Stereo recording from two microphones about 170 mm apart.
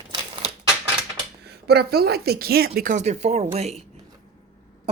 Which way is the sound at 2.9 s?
40° right (ahead or behind).